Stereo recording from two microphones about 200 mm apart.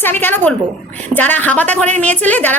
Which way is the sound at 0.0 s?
10° left (ahead or behind).